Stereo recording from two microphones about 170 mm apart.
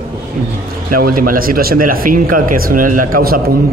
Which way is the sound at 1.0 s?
55° right (ahead or behind).